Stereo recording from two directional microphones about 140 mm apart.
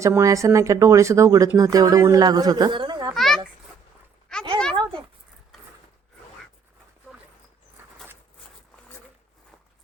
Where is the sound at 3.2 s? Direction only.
5° left (ahead or behind).